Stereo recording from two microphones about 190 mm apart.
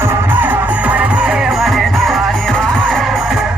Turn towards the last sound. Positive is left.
turn(degrees=5)  # may be behind; listen again after turning